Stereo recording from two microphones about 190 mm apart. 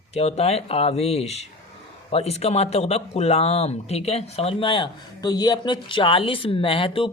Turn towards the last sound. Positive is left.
turn(degrees=25)  # may be behind; listen again after turning